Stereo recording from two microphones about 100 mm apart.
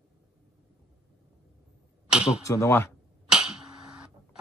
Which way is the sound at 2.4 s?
30° left (ahead or behind).